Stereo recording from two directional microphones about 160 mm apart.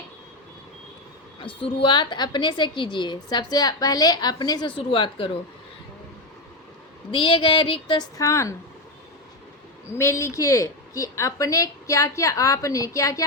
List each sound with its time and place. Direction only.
1.4 s a woman's voice: 35° left (ahead or behind)
7.1 s a sound: 35° left (ahead or behind)
8.2 s a woman's voice: 20° left (ahead or behind)
10.0 s a woman's voice: 15° left (ahead or behind)